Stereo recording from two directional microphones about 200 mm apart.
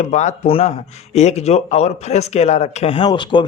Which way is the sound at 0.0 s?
35° left (ahead or behind).